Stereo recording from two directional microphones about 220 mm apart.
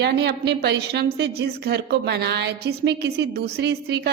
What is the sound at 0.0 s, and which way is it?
A woman's voice, 50° right (ahead or behind).